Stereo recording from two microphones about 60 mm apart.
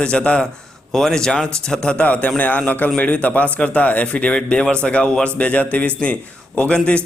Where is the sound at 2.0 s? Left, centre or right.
Left.